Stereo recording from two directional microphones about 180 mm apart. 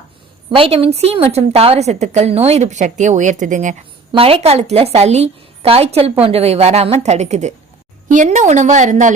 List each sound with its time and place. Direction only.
0.5 s a woman's voice: 30° right (ahead or behind)
4.1 s a woman's voice: 30° right (ahead or behind)